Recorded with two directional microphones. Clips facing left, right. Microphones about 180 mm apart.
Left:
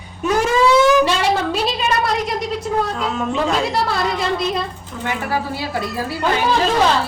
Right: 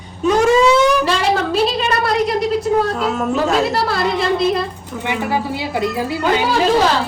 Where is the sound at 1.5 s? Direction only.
Centre (ahead or behind).